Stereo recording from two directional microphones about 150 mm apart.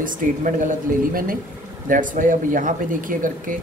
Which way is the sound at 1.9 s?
60° right (ahead or behind).